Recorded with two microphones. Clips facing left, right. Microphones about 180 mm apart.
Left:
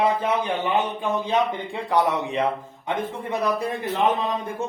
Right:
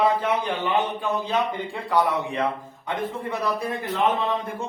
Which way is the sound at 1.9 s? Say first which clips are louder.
Left 1 dB; 20° left (ahead or behind).